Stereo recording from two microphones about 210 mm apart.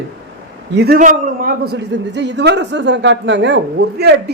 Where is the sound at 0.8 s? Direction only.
45° right (ahead or behind).